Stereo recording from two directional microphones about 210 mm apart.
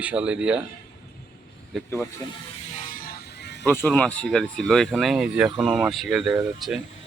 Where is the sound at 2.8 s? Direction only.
40° left (ahead or behind).